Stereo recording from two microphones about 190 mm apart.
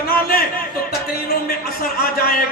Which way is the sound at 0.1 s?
50° left (ahead or behind).